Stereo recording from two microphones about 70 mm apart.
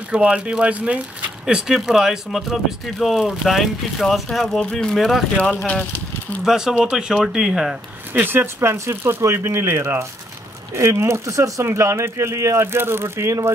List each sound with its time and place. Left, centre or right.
0.1 s speech: centre
1.4 s speech: centre
6.4 s speech: centre
8.1 s speech: right